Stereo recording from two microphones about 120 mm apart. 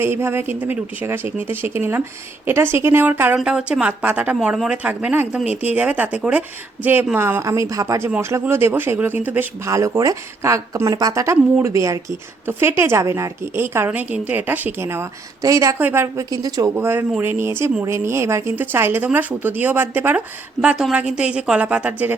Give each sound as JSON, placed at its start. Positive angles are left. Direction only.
{"t": 0.0, "sound": "a woman's voice", "side_deg": -20}
{"t": 9.6, "sound": "a woman's voice", "side_deg": -25}